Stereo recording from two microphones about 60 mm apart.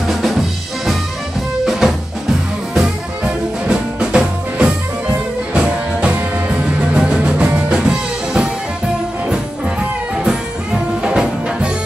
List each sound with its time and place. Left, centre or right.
0.1 s drum kit: centre
1.7 s music: centre
2.8 s music: centre
10.2 s music: centre